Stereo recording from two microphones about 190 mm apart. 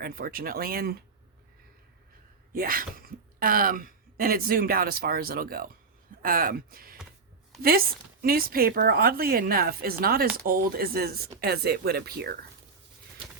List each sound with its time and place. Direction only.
0.0 s speech: 50° right (ahead or behind)
2.5 s speech: 50° right (ahead or behind)